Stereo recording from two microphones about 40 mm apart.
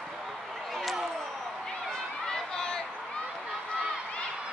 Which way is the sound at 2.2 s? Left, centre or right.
Centre.